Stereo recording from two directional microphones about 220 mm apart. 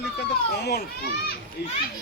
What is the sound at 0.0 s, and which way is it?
A child's voice, 50° left (ahead or behind).